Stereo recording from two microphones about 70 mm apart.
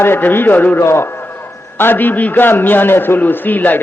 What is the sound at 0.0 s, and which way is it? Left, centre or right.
A man's voice, left.